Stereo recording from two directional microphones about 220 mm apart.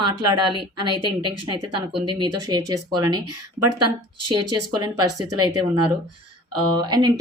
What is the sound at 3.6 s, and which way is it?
Speech, 90° right.